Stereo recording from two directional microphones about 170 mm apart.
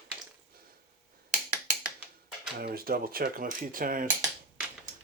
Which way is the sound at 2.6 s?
60° right (ahead or behind).